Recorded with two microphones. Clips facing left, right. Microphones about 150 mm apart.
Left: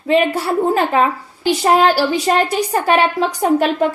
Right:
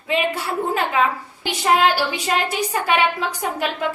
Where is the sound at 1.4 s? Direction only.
40° left (ahead or behind).